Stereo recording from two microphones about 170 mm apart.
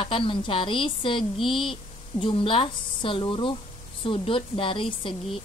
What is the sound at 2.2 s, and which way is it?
Speech, 30° left (ahead or behind).